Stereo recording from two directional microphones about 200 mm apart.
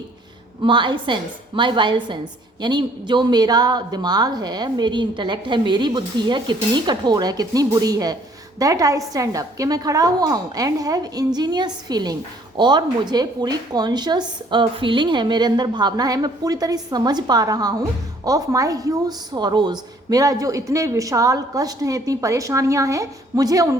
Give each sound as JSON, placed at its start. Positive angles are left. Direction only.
{"t": 0.6, "sound": "a woman's voice", "side_deg": -25}